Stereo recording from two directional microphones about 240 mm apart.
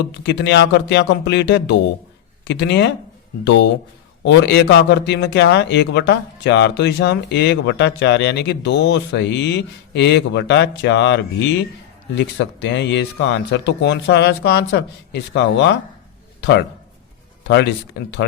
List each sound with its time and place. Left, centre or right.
0.2 s a man's voice: left
17.4 s a man's voice: left